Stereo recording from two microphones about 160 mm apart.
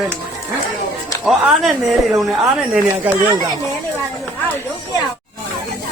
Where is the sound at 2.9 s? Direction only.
15° right (ahead or behind).